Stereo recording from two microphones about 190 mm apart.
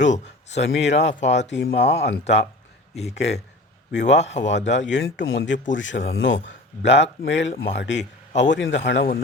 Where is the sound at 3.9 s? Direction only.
65° left (ahead or behind).